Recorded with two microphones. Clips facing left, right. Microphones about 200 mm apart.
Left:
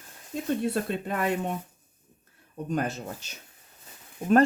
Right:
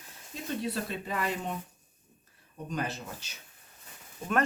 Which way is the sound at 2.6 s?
50° left (ahead or behind).